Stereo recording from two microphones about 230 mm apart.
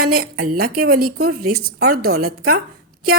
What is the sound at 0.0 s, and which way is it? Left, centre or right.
A woman's voice, right.